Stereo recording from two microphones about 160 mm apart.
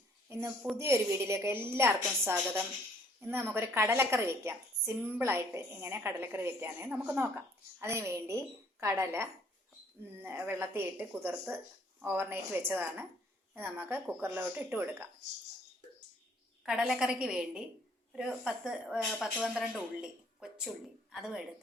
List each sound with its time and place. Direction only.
0.3 s speech: 15° right (ahead or behind)
16.6 s speech: 5° right (ahead or behind)